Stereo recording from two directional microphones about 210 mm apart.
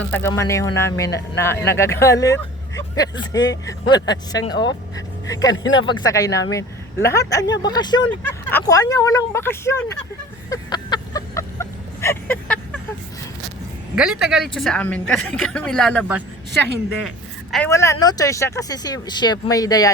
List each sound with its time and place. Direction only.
0.1 s speech: 10° left (ahead or behind)
5.5 s speech: 65° left (ahead or behind)
5.8 s speech: 20° left (ahead or behind)
10.5 s vehicle: 20° left (ahead or behind)
13.9 s speech: 5° right (ahead or behind)
17.5 s speech: 10° left (ahead or behind)